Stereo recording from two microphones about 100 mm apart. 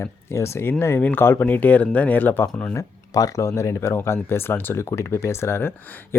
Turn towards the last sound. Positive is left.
turn(degrees=20)  # may be behind; listen again after turning